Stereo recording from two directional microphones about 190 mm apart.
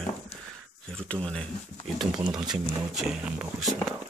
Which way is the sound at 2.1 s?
25° right (ahead or behind).